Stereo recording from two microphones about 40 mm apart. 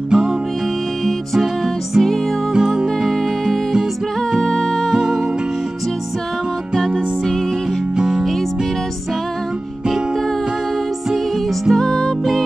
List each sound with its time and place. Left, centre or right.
0.1 s music: centre
2.0 s music: centre
4.4 s music: centre
4.9 s music: centre
7.9 s music: centre
11.7 s music: centre